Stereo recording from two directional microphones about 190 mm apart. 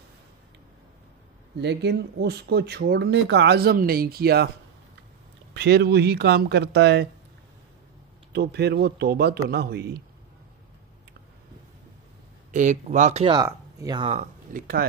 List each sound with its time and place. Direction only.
1.6 s speech: 65° right (ahead or behind)
5.5 s speech: 60° right (ahead or behind)
8.3 s speech: 60° right (ahead or behind)
12.4 s speech: 40° right (ahead or behind); by 14.0 s 20° right (ahead or behind)
14.0 s speech: 40° right (ahead or behind)